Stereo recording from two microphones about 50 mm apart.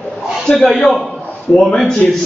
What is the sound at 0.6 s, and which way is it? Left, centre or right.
Speech, centre.